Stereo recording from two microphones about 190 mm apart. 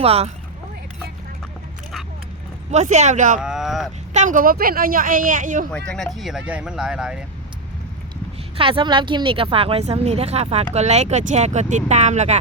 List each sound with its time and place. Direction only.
0.0 s speech: 30° right (ahead or behind)
2.7 s speech: 40° right (ahead or behind)
3.4 s speech: 5° right (ahead or behind)
4.1 s speech: 40° right (ahead or behind)
5.7 s speech: 5° left (ahead or behind)
8.5 s speech: 30° right (ahead or behind)